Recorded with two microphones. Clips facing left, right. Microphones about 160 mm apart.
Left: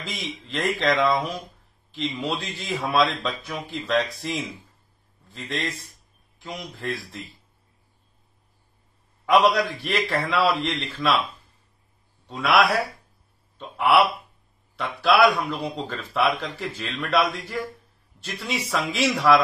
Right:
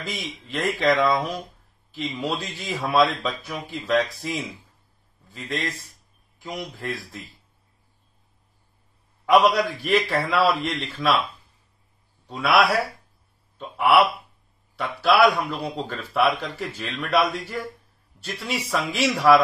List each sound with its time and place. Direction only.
0.0 s speech: 5° right (ahead or behind)
9.2 s speech: centre (ahead or behind)